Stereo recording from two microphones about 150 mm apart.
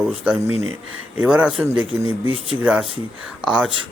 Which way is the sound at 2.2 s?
35° right (ahead or behind).